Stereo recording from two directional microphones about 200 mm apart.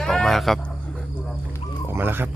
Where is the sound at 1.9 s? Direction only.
10° right (ahead or behind).